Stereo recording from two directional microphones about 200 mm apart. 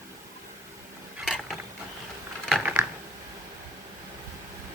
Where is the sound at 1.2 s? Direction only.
Centre (ahead or behind).